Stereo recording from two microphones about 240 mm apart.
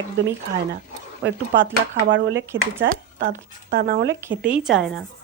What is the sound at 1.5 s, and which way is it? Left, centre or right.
A woman's voice, right.